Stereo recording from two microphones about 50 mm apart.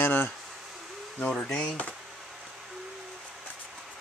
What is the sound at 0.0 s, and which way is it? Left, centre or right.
Bee, left.